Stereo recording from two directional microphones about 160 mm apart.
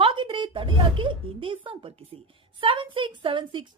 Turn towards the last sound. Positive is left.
turn(degrees=-30)  # may be behind; listen again after turning